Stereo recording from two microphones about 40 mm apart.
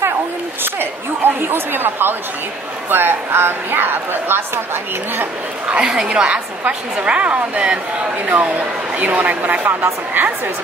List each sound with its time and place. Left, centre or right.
0.7 s speech: right
5.7 s a woman's voice: centre
8.3 s a woman's voice: right
9.6 s a woman's voice: right